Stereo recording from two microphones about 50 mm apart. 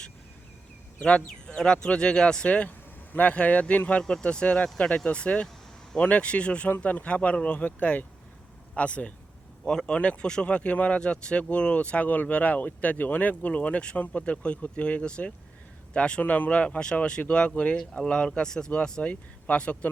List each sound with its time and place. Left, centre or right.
0.9 s speech: left
2.6 s vehicle: left
3.3 s speech: left
4.0 s speech: centre; by 8.0 s left
8.7 s speech: left
16.2 s speech: left